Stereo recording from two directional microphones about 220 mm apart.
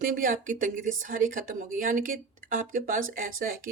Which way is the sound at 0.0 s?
40° right (ahead or behind).